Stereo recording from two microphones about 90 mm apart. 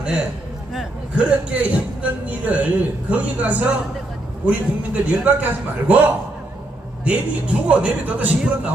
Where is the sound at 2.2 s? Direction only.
15° right (ahead or behind).